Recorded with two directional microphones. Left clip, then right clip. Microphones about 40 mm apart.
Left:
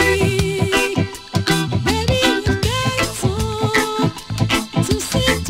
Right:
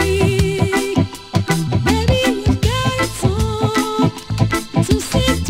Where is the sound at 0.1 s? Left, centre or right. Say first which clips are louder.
Right 1 dB; right.